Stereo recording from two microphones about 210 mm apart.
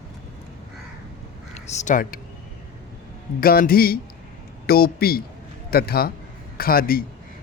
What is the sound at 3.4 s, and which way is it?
Speech, 45° left (ahead or behind).